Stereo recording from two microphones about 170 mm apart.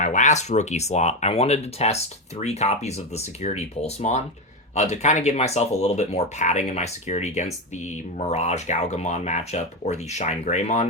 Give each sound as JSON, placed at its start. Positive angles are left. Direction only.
{"t": 0.0, "sound": "speech", "side_deg": 45}